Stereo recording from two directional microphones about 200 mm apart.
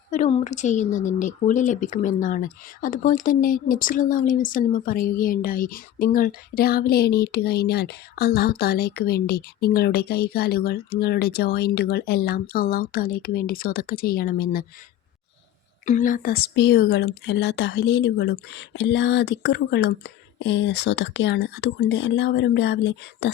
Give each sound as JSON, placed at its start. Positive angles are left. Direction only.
{"t": 0.1, "sound": "a woman's voice", "side_deg": 35}
{"t": 15.9, "sound": "speech", "side_deg": 40}